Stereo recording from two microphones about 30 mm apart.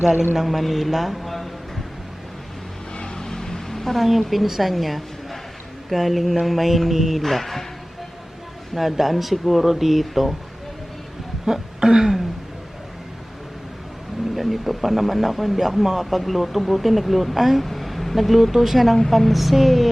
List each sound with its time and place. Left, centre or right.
0.4 s speech: centre
2.9 s vehicle: left
3.2 s a sound: centre
3.9 s a woman's voice: centre
7.2 s speech: centre
8.7 s speech: centre
11.8 s a sound: centre
14.3 s speech: centre